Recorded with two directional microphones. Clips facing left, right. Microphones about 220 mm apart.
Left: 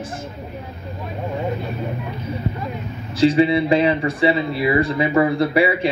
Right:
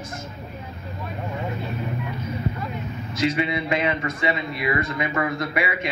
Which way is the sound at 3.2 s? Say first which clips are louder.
Left 9 dB; 30° left (ahead or behind).